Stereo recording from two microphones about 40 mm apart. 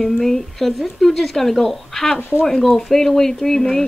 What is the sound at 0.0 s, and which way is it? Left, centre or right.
A woman's voice, centre.